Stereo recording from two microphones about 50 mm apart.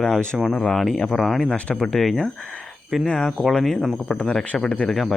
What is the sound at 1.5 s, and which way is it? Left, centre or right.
Speech, centre.